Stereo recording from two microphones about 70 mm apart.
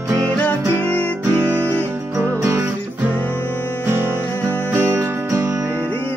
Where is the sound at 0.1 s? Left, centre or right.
Right.